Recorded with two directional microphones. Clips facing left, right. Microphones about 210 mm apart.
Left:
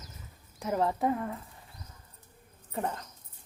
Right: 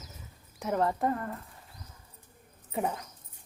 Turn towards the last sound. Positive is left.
turn(degrees=-10)  # may be behind; listen again after turning